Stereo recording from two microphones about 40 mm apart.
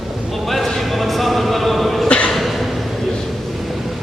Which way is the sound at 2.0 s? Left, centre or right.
Left.